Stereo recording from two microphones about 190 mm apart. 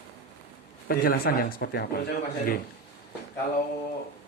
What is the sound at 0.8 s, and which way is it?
Speech, 50° left (ahead or behind).